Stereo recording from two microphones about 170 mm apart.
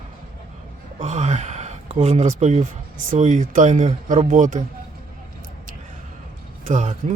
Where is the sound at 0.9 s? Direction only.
45° right (ahead or behind).